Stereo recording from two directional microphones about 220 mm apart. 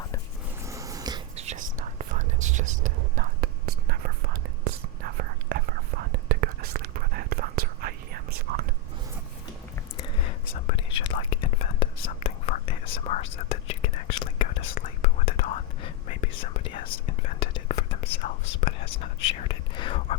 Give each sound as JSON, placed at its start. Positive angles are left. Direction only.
{"t": 0.6, "sound": "a sound", "side_deg": -15}
{"t": 1.4, "sound": "whispering", "side_deg": -35}
{"t": 10.0, "sound": "whispering", "side_deg": 25}